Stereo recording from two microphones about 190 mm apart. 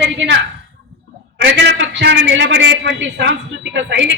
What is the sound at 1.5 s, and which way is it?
A man's voice, 65° right (ahead or behind).